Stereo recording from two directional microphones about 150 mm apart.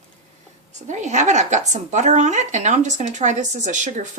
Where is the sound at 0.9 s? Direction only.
50° right (ahead or behind).